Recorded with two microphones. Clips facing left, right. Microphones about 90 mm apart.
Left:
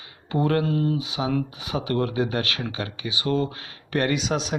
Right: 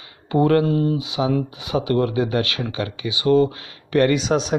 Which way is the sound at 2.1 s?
30° left (ahead or behind).